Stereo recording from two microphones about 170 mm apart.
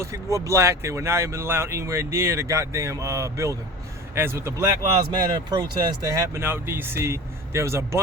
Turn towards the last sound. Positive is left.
turn(degrees=-15)  # may be behind; listen again after turning